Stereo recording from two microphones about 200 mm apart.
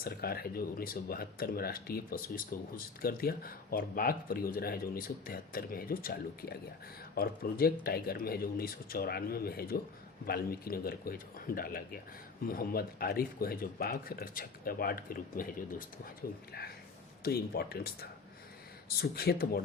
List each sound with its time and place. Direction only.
0.0 s speech: 50° left (ahead or behind)